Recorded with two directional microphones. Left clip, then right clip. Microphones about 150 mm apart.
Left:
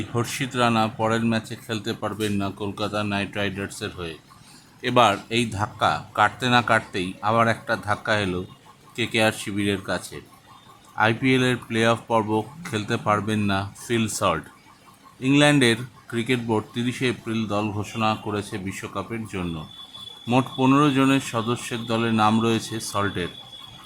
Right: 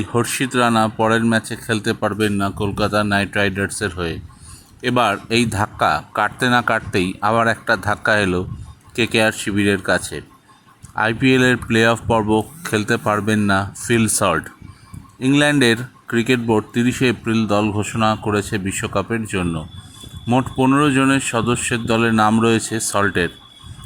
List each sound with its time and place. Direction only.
0.1 s speech: 35° right (ahead or behind)
20.7 s speech: 30° right (ahead or behind)